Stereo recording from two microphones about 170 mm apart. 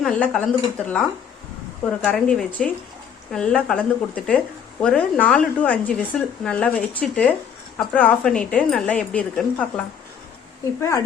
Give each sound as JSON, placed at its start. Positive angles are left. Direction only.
{"t": 0.0, "sound": "speech", "side_deg": 5}
{"t": 2.0, "sound": "speech", "side_deg": 5}
{"t": 10.8, "sound": "speech", "side_deg": 15}